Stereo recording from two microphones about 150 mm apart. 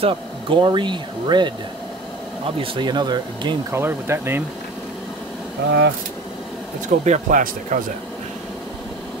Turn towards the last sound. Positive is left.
turn(degrees=-65)  # may be behind; listen again after turning